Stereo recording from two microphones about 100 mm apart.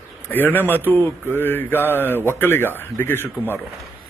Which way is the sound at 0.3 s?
20° left (ahead or behind).